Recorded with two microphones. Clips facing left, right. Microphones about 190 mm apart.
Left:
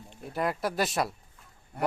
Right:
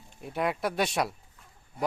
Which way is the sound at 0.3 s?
Centre (ahead or behind).